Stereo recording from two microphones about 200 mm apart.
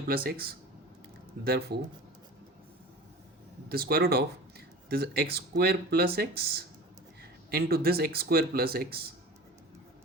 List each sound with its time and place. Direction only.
0.1 s speech: 50° right (ahead or behind)
3.7 s speech: 50° right (ahead or behind)